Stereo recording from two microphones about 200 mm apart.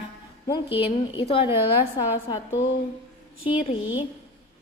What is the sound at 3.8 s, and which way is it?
Speech, 75° left (ahead or behind).